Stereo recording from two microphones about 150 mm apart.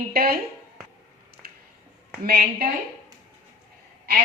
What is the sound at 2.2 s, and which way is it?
Speech, 90° right.